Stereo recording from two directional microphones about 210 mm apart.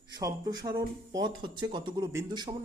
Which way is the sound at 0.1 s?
20° right (ahead or behind).